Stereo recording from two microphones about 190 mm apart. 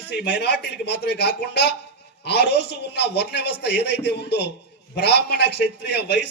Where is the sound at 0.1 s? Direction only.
60° left (ahead or behind).